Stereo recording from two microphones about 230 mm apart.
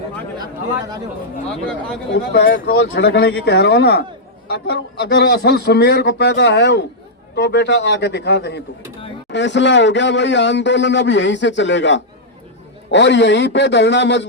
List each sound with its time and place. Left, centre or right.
2.1 s a man's voice: left